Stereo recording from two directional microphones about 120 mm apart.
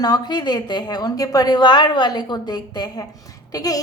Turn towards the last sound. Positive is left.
turn(degrees=30)  # may be behind; listen again after turning